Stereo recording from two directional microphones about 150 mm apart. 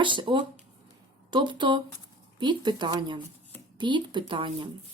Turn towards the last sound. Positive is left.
turn(degrees=-35)  # may be behind; listen again after turning